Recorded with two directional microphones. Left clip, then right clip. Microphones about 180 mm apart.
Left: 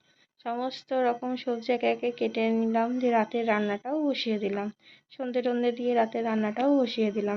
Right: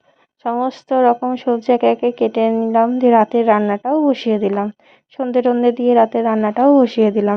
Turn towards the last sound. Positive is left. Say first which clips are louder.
# right 13 dB
turn(degrees=-55)  # may be behind; listen again after turning